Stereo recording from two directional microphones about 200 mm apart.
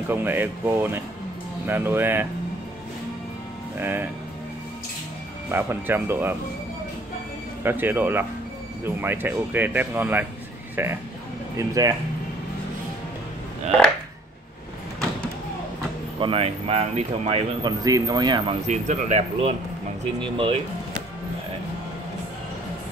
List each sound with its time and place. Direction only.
0.1 s speech: 10° right (ahead or behind)
3.8 s speech: 10° right (ahead or behind)
5.5 s speech: 10° right (ahead or behind)
7.6 s speech: 10° right (ahead or behind)
16.2 s speech: 25° right (ahead or behind)
17.8 s speech: 20° right (ahead or behind)
18.7 s speech: 35° right (ahead or behind)